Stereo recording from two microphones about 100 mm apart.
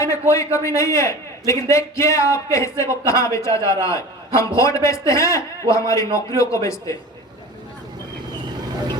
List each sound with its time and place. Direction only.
0.0 s a man's voice: 30° left (ahead or behind)